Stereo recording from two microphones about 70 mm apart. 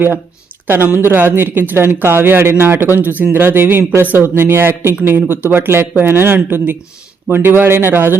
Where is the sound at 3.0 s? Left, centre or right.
Right.